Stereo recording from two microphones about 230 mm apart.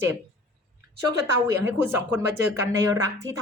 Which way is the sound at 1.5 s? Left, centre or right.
Centre.